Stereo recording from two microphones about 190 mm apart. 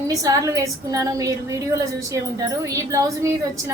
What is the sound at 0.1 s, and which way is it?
A woman's voice, 15° right (ahead or behind).